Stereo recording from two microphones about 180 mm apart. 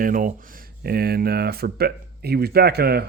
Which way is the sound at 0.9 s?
60° right (ahead or behind).